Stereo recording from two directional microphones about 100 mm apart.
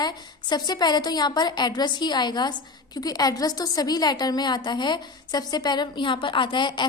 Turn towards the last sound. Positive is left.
turn(degrees=50)  # may be behind; listen again after turning